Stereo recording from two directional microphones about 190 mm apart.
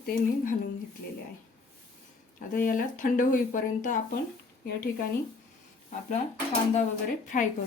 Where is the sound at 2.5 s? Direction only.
45° left (ahead or behind).